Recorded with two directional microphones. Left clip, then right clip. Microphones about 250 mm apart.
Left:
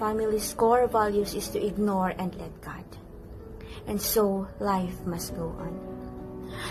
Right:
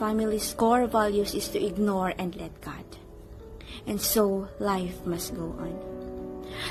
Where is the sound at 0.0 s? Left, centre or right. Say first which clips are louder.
Left 1 dB; right.